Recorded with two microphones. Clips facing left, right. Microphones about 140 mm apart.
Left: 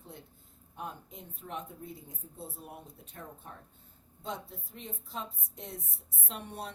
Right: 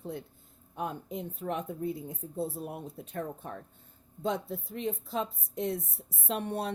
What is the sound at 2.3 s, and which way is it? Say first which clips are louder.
Speech: right 11 dB; 75° right (ahead or behind).